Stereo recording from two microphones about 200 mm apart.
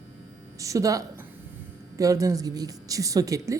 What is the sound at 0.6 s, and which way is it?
A woman's voice, 15° right (ahead or behind).